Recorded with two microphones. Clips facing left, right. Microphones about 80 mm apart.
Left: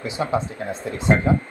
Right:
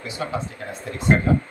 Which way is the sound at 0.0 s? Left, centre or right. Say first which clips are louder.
Left 5 dB; left.